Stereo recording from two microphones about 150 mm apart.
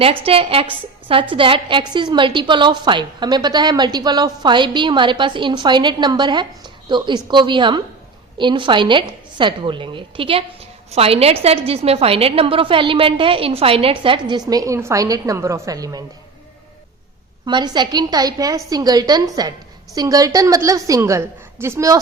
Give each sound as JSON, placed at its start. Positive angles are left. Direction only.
{"t": 0.0, "sound": "a woman's voice", "side_deg": -40}
{"t": 17.4, "sound": "a woman's voice", "side_deg": -30}